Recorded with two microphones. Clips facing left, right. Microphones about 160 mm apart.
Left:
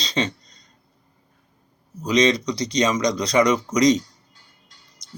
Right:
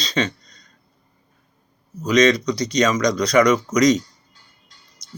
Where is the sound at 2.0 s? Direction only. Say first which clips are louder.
Right 3 dB; 25° left (ahead or behind).